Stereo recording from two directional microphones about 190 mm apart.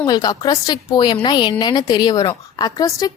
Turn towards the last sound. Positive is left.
turn(degrees=20)  # may be behind; listen again after turning